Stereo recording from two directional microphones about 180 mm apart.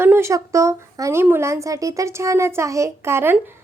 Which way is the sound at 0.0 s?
15° right (ahead or behind).